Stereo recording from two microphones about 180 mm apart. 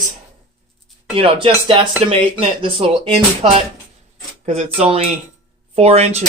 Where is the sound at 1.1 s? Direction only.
30° right (ahead or behind).